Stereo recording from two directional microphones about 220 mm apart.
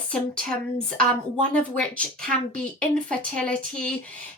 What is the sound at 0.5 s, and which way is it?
A woman's voice, 5° left (ahead or behind).